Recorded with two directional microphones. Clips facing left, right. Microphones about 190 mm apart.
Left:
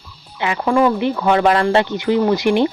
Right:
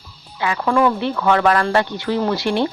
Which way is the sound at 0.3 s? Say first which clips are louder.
Left 2 dB; 20° left (ahead or behind).